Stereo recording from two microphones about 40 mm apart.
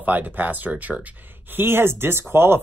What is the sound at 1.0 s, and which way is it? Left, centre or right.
Speech, right.